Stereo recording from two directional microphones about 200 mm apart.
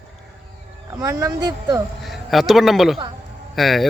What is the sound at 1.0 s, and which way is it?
Speech, 15° right (ahead or behind).